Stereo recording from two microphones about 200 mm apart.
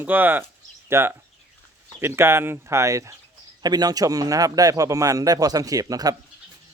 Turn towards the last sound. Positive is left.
turn(degrees=-20)  # may be behind; listen again after turning